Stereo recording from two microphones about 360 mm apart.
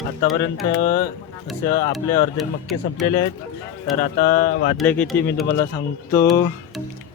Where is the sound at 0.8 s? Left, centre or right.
Left.